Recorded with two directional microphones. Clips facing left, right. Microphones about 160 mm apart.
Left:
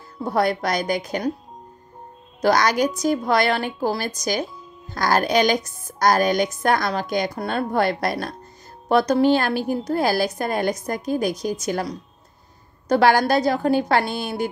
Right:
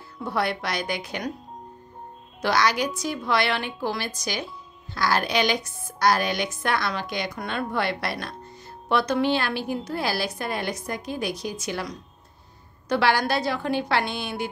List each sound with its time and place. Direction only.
0.2 s a woman's voice: 45° left (ahead or behind)
2.4 s a woman's voice: 45° left (ahead or behind)